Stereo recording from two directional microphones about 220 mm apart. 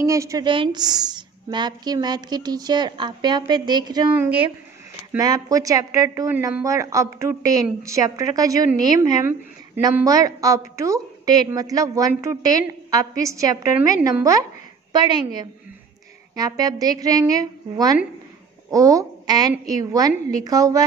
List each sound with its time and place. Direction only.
0.0 s a woman's voice: 15° right (ahead or behind)